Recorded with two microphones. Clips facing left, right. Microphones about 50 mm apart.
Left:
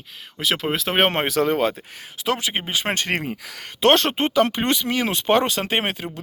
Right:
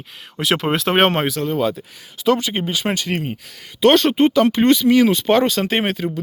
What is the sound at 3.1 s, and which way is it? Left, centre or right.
Speech, left.